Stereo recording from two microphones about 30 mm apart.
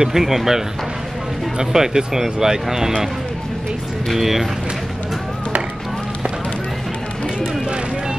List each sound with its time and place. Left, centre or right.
0.0 s speech: centre
1.6 s speech: centre
4.1 s speech: centre